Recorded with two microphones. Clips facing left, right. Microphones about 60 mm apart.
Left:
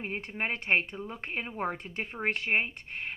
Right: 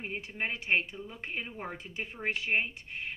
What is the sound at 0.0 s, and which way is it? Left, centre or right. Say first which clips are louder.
A woman's voice: left 2 dB; left.